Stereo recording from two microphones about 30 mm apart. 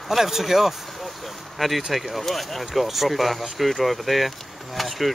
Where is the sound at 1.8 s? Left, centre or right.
Centre.